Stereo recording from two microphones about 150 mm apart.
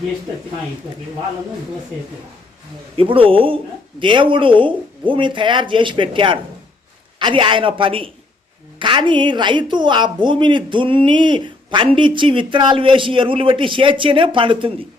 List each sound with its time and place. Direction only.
2.9 s a woman's voice: 35° right (ahead or behind)